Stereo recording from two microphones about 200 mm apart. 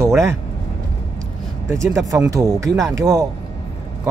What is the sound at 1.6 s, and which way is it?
Speech, 15° right (ahead or behind).